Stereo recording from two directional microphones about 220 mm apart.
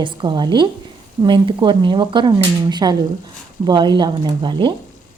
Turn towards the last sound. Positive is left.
turn(degrees=-20)  # may be behind; listen again after turning